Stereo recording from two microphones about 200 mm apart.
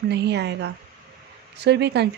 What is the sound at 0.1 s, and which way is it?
Speech, 55° right (ahead or behind).